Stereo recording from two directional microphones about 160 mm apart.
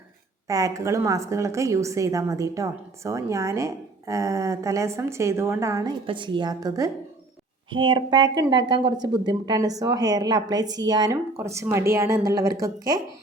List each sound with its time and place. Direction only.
0.4 s a woman's voice: 20° right (ahead or behind)
6.1 s a woman's voice: 30° right (ahead or behind)